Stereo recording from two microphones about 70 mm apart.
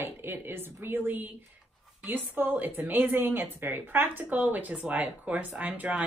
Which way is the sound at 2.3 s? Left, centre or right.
Right.